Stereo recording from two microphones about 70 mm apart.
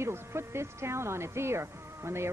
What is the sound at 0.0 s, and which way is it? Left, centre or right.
A woman's voice, right.